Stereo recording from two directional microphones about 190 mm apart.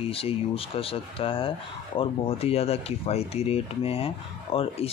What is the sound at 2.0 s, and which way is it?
Dishes, 30° left (ahead or behind).